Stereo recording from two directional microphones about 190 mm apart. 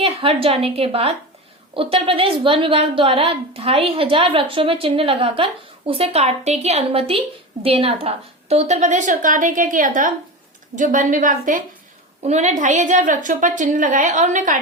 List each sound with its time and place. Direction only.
0.0 s a woman's voice: 30° right (ahead or behind)